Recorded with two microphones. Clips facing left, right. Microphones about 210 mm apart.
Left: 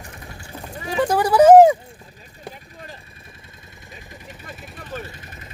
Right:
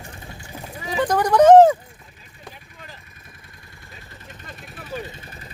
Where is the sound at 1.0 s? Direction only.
10° left (ahead or behind).